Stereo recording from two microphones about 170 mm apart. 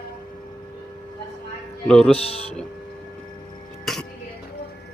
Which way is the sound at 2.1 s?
35° left (ahead or behind).